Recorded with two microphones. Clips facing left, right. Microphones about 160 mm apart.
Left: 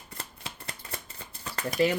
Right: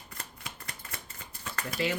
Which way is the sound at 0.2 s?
30° left (ahead or behind).